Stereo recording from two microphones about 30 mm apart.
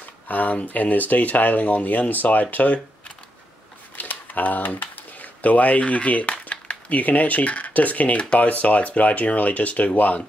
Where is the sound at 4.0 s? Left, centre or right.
Left.